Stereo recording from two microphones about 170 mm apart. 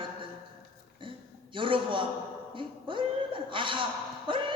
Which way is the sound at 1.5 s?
30° right (ahead or behind).